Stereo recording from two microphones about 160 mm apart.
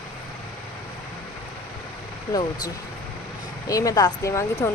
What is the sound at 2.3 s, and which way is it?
Speech, 20° left (ahead or behind).